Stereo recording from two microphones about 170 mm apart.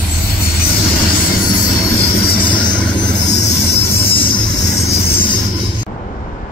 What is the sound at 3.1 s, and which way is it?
Vehicle, 80° left.